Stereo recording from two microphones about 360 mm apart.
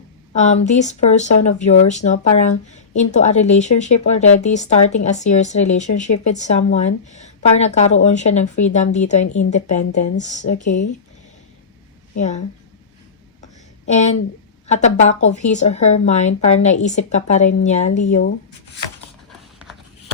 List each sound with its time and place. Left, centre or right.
0.3 s speech: centre
12.1 s speech: centre
14.7 s speech: centre